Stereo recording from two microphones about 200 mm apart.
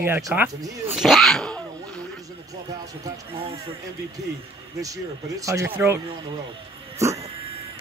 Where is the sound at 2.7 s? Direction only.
15° right (ahead or behind).